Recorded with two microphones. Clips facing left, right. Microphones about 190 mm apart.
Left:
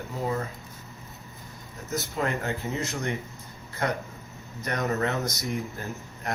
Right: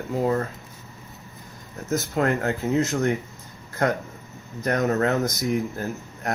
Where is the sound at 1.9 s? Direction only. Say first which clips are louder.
Right 6 dB; 50° right (ahead or behind).